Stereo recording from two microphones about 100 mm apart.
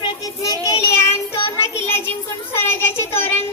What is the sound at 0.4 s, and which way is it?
Child singing, 35° left (ahead or behind).